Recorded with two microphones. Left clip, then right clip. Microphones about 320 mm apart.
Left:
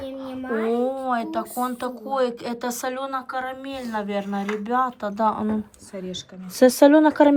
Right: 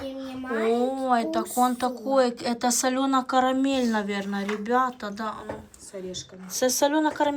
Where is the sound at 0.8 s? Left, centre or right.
Centre.